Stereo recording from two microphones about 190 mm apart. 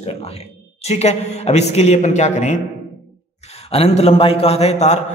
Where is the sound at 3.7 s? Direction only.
30° left (ahead or behind).